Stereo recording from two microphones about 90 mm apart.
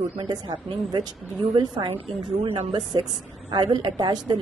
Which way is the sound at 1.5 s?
70° right (ahead or behind).